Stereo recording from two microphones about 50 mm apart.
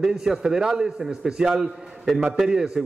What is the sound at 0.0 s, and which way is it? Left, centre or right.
A man's voice, centre.